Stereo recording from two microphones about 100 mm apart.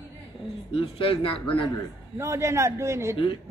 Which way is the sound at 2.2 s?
30° right (ahead or behind).